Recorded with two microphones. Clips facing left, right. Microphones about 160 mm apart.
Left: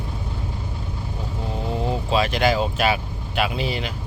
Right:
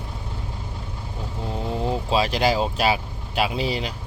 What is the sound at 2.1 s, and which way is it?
Speech, 30° right (ahead or behind).